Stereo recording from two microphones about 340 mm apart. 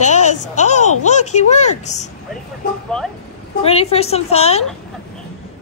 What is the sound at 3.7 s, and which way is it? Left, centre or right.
Speech, centre.